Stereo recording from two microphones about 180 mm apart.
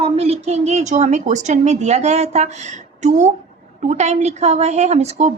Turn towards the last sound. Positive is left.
turn(degrees=-40)  # may be behind; listen again after turning